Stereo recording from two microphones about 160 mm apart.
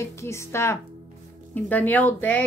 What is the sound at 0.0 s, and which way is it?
A woman's voice, 15° left (ahead or behind).